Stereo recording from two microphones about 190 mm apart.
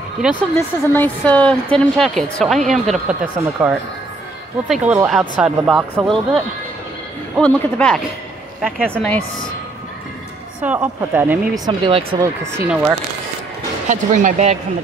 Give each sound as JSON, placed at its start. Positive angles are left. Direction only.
{"t": 0.6, "sound": "a woman's voice", "side_deg": 10}
{"t": 10.6, "sound": "speech", "side_deg": -10}
{"t": 11.6, "sound": "speech", "side_deg": -25}
{"t": 12.5, "sound": "speech", "side_deg": -10}
{"t": 13.8, "sound": "speech", "side_deg": -40}